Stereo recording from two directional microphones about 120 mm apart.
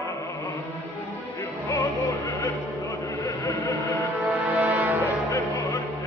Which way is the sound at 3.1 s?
30° left (ahead or behind).